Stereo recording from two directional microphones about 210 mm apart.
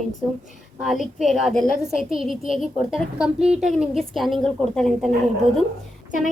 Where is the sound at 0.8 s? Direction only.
Centre (ahead or behind).